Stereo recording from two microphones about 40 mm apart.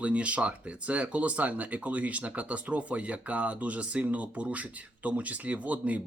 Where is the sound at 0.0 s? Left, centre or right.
Right.